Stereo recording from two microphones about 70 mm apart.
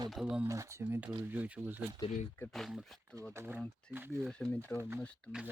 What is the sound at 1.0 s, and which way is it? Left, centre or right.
Speech, right.